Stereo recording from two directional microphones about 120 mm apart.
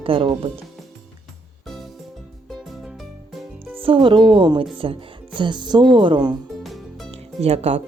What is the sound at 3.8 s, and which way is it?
Speech, 45° right (ahead or behind).